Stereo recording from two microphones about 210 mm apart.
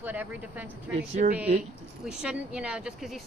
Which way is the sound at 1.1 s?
35° right (ahead or behind).